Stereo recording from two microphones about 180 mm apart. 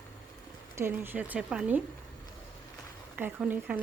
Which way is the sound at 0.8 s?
10° right (ahead or behind).